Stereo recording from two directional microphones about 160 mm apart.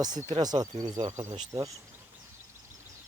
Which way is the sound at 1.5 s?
20° right (ahead or behind).